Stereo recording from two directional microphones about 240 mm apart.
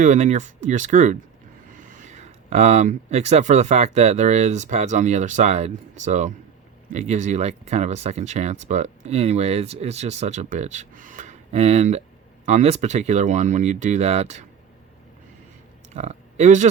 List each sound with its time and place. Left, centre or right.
0.0 s speech: right
16.0 s speech: right